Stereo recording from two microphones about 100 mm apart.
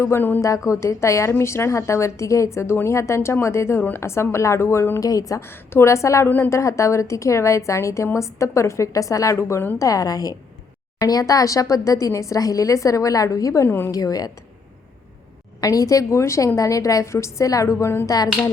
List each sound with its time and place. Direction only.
0.0 s a woman's voice: 25° left (ahead or behind)
0.4 s a woman's voice: 30° left (ahead or behind)
13.9 s a woman's voice: 40° left (ahead or behind)
15.6 s a woman's voice: 35° left (ahead or behind)